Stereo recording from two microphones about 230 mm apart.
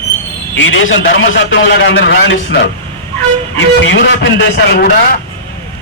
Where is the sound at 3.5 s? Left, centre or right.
Left.